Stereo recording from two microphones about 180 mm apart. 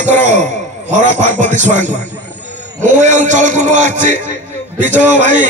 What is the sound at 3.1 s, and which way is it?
Music, 40° right (ahead or behind).